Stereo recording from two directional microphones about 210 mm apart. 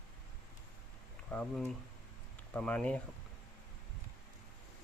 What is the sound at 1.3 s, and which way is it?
Speech, 5° left (ahead or behind).